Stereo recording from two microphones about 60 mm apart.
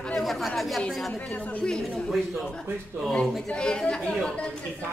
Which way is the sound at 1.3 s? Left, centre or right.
Left.